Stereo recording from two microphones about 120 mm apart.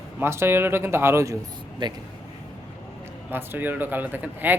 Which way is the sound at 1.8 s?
40° right (ahead or behind).